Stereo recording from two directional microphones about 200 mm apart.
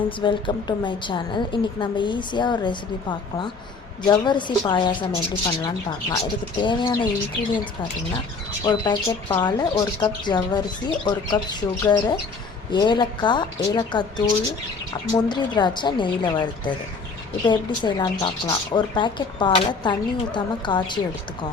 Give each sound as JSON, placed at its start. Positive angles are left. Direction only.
{"t": 0.2, "sound": "speech", "side_deg": 25}
{"t": 8.6, "sound": "speech", "side_deg": 20}